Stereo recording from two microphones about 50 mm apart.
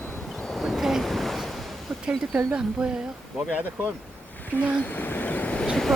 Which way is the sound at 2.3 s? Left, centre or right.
Right.